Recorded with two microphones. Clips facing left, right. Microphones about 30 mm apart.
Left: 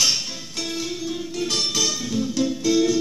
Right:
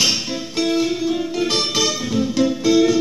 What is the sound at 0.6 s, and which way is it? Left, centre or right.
Music, right.